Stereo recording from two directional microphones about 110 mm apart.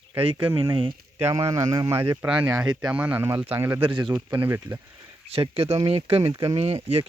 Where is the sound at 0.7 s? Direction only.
45° right (ahead or behind).